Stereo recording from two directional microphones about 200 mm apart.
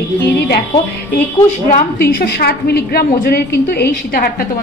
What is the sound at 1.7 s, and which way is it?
A woman's voice, 45° left (ahead or behind).